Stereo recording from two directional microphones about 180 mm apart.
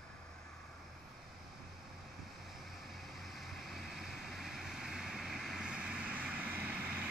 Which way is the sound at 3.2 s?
Centre (ahead or behind).